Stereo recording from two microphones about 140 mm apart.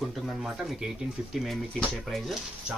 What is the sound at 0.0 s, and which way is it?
Speech, centre (ahead or behind).